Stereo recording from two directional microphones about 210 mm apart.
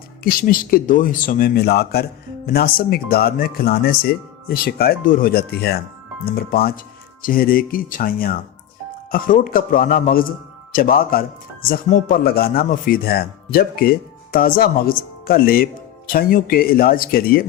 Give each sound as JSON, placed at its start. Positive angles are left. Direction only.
{"t": 0.2, "sound": "a man's voice", "side_deg": 45}